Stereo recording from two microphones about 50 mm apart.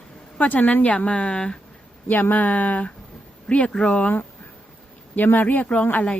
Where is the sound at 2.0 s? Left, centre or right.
Left.